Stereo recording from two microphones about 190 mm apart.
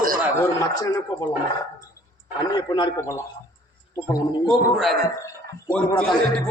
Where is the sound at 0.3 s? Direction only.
20° left (ahead or behind).